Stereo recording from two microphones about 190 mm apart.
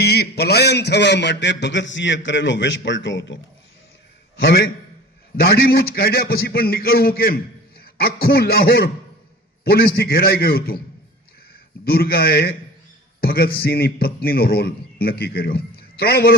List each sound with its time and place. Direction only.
0.0 s a man's voice: 55° left (ahead or behind)
4.4 s a man's voice: 60° left (ahead or behind)
11.9 s a man's voice: 50° left (ahead or behind)